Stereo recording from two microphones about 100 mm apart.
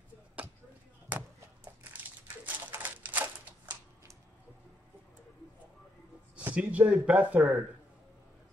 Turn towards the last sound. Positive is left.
turn(degrees=-10)  # may be behind; listen again after turning